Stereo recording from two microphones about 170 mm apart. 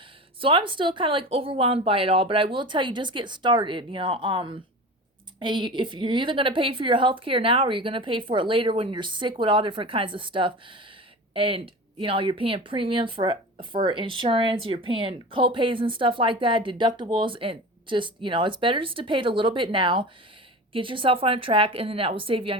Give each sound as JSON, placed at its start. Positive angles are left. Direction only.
{"t": 0.3, "sound": "a woman's voice", "side_deg": -30}